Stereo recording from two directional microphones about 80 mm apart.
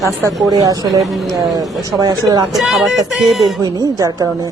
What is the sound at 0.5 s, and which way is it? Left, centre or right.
Speech, right.